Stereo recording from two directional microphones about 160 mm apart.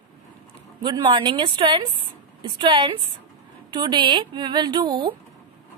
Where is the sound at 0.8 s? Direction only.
30° right (ahead or behind).